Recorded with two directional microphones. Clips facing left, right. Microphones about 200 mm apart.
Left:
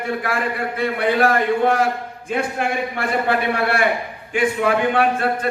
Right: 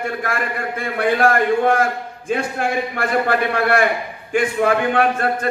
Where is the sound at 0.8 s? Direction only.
50° right (ahead or behind).